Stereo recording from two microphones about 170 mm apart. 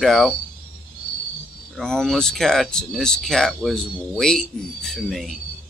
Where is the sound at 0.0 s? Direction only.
Centre (ahead or behind).